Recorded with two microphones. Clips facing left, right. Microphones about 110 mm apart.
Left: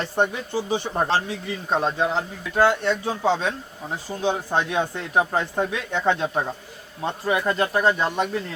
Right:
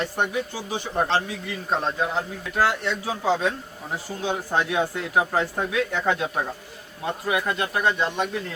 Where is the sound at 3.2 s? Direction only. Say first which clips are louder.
Even; 25° left (ahead or behind).